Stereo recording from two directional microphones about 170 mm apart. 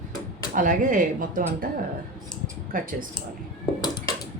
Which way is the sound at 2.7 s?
55° right (ahead or behind).